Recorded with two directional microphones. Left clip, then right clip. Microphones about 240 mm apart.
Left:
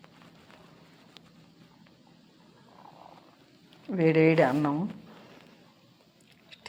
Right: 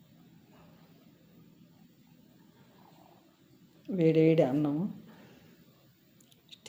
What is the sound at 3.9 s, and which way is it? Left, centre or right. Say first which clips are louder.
Speech: left 2 dB; centre.